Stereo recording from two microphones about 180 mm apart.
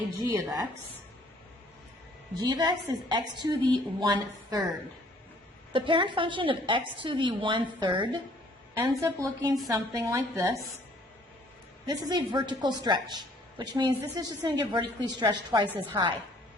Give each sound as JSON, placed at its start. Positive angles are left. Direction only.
{"t": 0.2, "sound": "a woman's voice", "side_deg": -15}
{"t": 2.5, "sound": "a woman's voice", "side_deg": -25}
{"t": 5.7, "sound": "a woman's voice", "side_deg": -30}
{"t": 8.8, "sound": "a woman's voice", "side_deg": -15}
{"t": 11.9, "sound": "a woman's voice", "side_deg": -25}